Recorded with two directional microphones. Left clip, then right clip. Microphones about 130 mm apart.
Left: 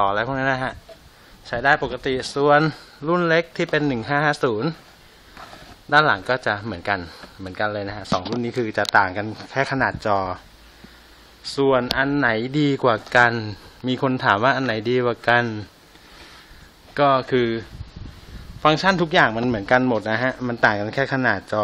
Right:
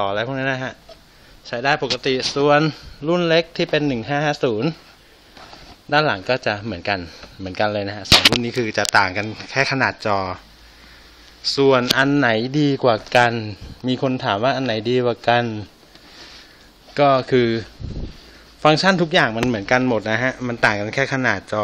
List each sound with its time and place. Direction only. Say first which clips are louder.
0.0 s speech: left 1 dB; 5° right (ahead or behind)
5.9 s speech: left 1 dB; 15° right (ahead or behind)
7.4 s speech: right 4 dB; 30° right (ahead or behind)
8.0 s speech: right 13 dB; 10° right (ahead or behind)
11.5 s speech: right 3 dB; 25° right (ahead or behind)
11.9 s speech: right 4 dB; 40° right (ahead or behind)
12.3 s speech: right 2 dB; 15° right (ahead or behind)
16.9 s speech: right 2 dB; 20° right (ahead or behind)
19.0 s speech: even; 10° right (ahead or behind)